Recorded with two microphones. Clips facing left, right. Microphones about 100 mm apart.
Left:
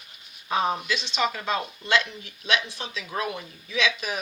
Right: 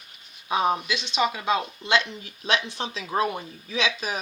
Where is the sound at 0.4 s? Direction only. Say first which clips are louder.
Right 2 dB; 10° right (ahead or behind).